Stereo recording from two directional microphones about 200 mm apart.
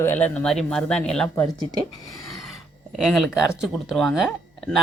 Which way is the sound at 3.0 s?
Centre (ahead or behind).